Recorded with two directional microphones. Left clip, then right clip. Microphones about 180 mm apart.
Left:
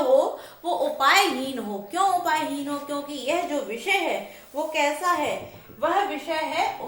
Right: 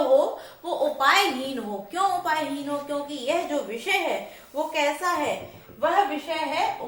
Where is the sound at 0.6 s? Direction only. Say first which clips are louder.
Left 1 dB; 15° left (ahead or behind).